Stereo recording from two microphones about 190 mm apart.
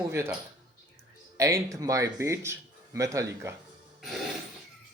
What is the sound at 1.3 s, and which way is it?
Speech, 15° right (ahead or behind).